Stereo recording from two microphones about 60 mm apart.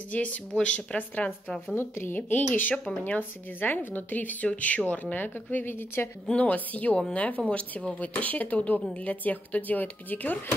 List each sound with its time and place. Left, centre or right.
0.1 s speech: left
1.8 s a woman's voice: left
6.3 s speech: left